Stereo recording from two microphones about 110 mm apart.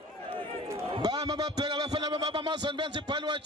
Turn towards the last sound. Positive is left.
turn(degrees=-45)  # may be behind; listen again after turning